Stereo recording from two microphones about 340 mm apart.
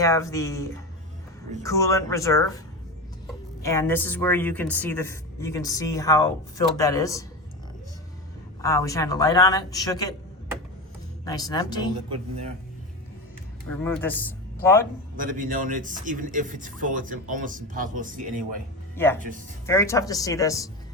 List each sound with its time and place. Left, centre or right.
0.0 s speech: centre
3.6 s speech: centre
8.6 s speech: centre
11.3 s speech: centre
13.8 s a man's voice: centre
15.1 s a man's voice: right
19.6 s speech: centre